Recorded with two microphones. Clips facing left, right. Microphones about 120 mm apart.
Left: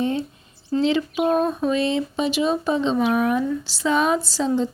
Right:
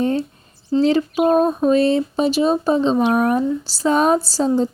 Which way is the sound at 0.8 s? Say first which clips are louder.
Right 4 dB; 40° right (ahead or behind).